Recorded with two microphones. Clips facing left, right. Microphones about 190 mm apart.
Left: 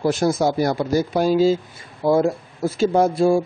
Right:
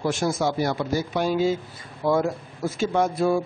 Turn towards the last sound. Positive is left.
turn(degrees=30)  # may be behind; listen again after turning